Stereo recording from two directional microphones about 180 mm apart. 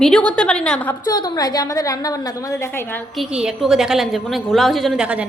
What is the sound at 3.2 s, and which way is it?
A woman's voice, 5° right (ahead or behind).